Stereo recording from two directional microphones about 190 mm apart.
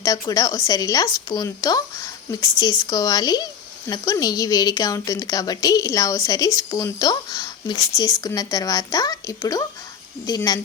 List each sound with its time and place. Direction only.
0.0 s speech: 20° left (ahead or behind)